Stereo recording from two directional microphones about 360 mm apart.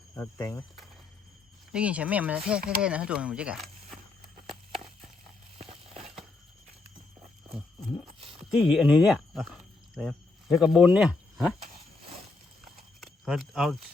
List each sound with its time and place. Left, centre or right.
0.2 s speech: centre
5.5 s a sound: centre
8.4 s speech: centre
13.0 s speech: centre